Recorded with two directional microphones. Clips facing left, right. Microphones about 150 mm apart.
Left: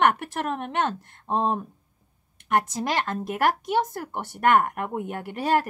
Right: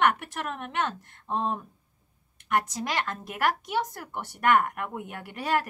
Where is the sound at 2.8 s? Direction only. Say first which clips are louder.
Left 5 dB; 30° left (ahead or behind).